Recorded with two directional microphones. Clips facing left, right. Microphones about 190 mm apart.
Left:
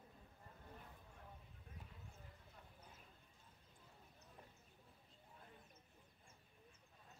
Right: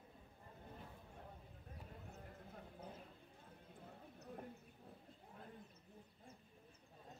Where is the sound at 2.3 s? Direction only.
55° right (ahead or behind).